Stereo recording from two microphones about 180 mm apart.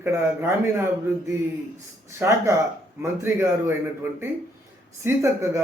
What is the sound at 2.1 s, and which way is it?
Speech, 15° right (ahead or behind).